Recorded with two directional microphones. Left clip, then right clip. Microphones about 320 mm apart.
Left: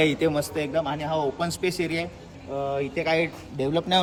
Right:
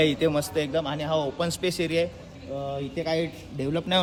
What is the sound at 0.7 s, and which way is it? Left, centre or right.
Speech, centre.